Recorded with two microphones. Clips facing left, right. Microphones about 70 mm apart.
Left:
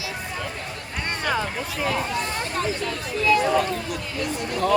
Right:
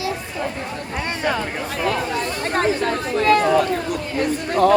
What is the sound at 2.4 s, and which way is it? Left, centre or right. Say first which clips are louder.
Speech: right 7 dB; right.